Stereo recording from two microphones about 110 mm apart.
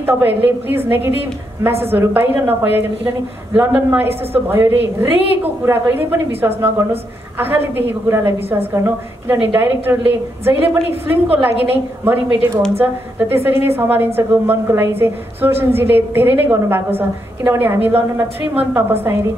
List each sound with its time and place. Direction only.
0.0 s a woman's voice: 20° right (ahead or behind)